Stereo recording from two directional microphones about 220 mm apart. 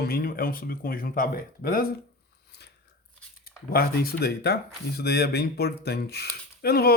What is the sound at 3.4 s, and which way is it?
Speech, 45° left (ahead or behind).